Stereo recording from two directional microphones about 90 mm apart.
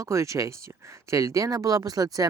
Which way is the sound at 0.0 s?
35° right (ahead or behind).